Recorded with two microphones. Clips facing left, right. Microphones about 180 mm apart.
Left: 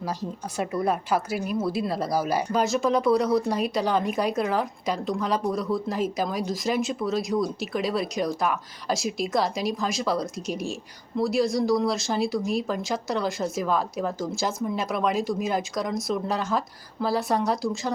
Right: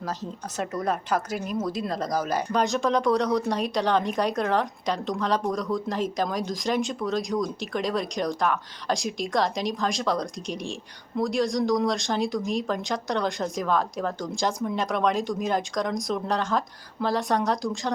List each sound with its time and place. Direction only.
0.0 s speech: 10° left (ahead or behind)